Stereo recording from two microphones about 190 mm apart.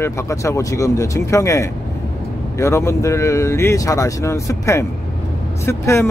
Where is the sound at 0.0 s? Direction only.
15° left (ahead or behind).